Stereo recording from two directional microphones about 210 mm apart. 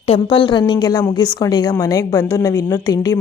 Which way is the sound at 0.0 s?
25° left (ahead or behind).